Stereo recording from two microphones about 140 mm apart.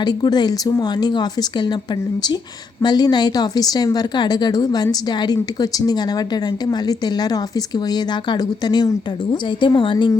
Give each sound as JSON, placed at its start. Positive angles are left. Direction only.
{"t": 0.0, "sound": "a woman's voice", "side_deg": 30}
{"t": 2.8, "sound": "a woman's voice", "side_deg": 30}